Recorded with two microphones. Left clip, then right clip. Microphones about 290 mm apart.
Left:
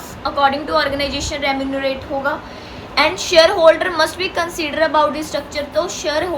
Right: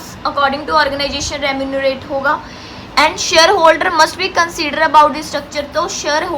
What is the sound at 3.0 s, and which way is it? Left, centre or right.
A woman's voice, right.